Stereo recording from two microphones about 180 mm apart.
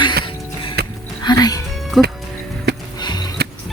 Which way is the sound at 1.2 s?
20° left (ahead or behind).